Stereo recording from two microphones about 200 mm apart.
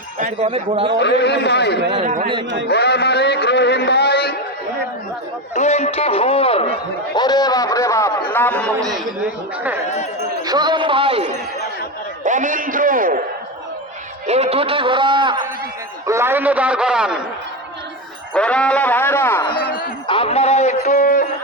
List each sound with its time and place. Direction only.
0.2 s speech: 30° right (ahead or behind)
0.9 s a man's voice: 60° left (ahead or behind)
5.5 s a man's voice: 35° left (ahead or behind); by 8.7 s 5° left (ahead or behind)
10.4 s a man's voice: 20° right (ahead or behind)
12.2 s a man's voice: 40° right (ahead or behind)
14.3 s a man's voice: 30° right (ahead or behind)
16.0 s a man's voice: 15° right (ahead or behind)
18.3 s speech: 5° left (ahead or behind)
20.1 s a man's voice: 30° left (ahead or behind)